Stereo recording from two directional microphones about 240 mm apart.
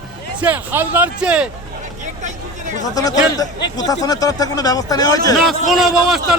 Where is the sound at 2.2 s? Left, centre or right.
Right.